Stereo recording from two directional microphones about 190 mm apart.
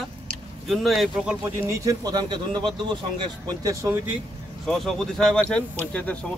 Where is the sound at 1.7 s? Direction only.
20° right (ahead or behind).